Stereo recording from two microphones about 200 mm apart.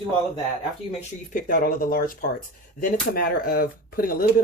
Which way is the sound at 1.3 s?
45° left (ahead or behind).